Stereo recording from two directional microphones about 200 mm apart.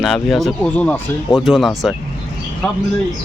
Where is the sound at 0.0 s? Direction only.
Centre (ahead or behind).